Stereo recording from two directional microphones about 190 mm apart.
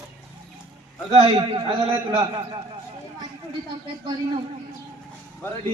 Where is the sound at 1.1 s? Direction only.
25° right (ahead or behind).